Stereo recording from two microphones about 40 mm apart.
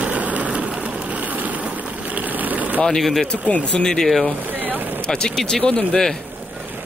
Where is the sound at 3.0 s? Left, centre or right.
Centre.